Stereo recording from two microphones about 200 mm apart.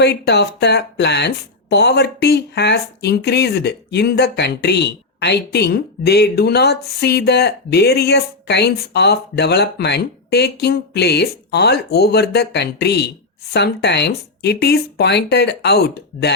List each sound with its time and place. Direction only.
0.0 s speech: 55° left (ahead or behind)